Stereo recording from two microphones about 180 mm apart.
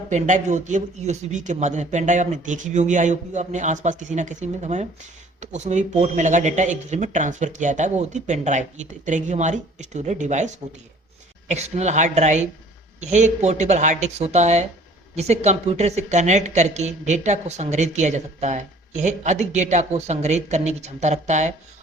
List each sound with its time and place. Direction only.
0.1 s a woman's voice: 45° right (ahead or behind)